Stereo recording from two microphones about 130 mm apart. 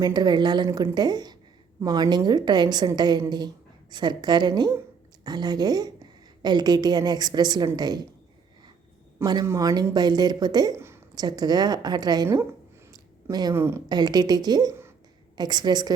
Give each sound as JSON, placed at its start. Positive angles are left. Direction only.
{"t": 0.0, "sound": "a woman's voice", "side_deg": -30}
{"t": 9.2, "sound": "a woman's voice", "side_deg": -30}
{"t": 10.8, "sound": "a sound", "side_deg": -20}
{"t": 11.2, "sound": "a woman's voice", "side_deg": -30}
{"t": 12.9, "sound": "a sound", "side_deg": -30}
{"t": 13.5, "sound": "speech", "side_deg": -20}
{"t": 13.8, "sound": "a woman's voice", "side_deg": -35}
{"t": 14.7, "sound": "a sound", "side_deg": -20}
{"t": 15.4, "sound": "a woman's voice", "side_deg": -30}